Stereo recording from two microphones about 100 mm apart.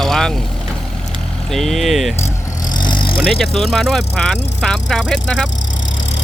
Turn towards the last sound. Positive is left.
turn(degrees=5)  # may be behind; listen again after turning